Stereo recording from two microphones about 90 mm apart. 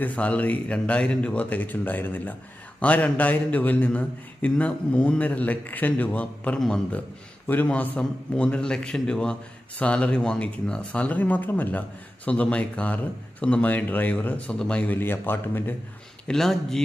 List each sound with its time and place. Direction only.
0.0 s a man's voice: 15° left (ahead or behind)
6.6 s speech: 5° left (ahead or behind)
7.4 s a man's voice: 20° left (ahead or behind)
16.2 s speech: 5° left (ahead or behind)